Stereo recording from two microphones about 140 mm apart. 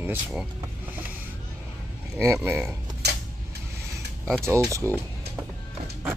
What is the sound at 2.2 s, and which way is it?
Speech, 15° right (ahead or behind).